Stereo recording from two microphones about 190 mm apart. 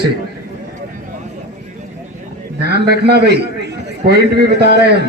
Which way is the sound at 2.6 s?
60° right (ahead or behind).